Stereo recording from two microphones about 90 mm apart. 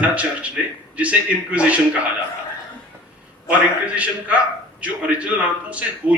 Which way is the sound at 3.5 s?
15° right (ahead or behind).